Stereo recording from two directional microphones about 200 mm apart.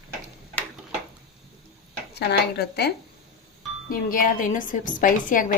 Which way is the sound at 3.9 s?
45° left (ahead or behind).